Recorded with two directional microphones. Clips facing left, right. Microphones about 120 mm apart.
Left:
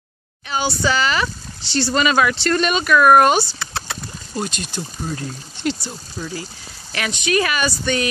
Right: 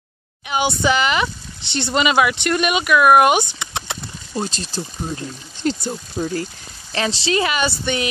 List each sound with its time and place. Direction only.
0.5 s speech: 20° right (ahead or behind)